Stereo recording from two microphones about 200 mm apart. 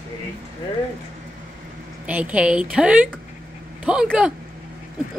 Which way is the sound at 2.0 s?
5° right (ahead or behind).